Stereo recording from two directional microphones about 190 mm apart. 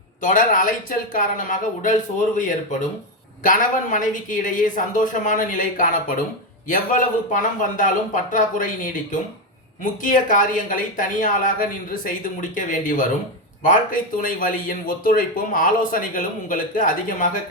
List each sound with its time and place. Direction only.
0.2 s speech: 45° left (ahead or behind)
3.4 s speech: 45° left (ahead or behind)